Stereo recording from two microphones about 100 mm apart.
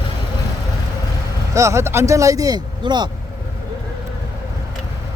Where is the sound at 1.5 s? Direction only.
30° right (ahead or behind); by 3.0 s 45° right (ahead or behind).